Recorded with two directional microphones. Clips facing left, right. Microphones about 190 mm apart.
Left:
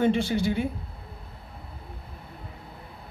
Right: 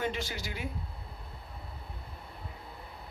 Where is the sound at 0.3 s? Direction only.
30° left (ahead or behind).